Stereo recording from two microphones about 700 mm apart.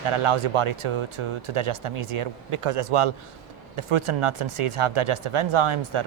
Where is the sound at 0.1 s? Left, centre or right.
Right.